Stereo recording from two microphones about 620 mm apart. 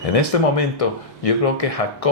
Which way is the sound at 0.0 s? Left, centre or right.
Left.